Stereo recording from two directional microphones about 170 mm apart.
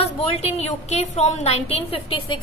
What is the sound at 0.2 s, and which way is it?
A woman's voice, 35° left (ahead or behind).